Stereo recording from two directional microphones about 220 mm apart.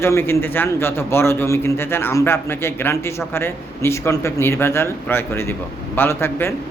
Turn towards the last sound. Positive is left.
turn(degrees=10)  # may be behind; listen again after turning